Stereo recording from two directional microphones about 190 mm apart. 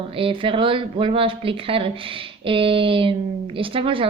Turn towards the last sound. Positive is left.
turn(degrees=-30)  # may be behind; listen again after turning